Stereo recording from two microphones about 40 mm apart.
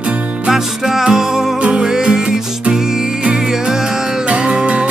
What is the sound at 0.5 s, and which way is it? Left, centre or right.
Music, centre.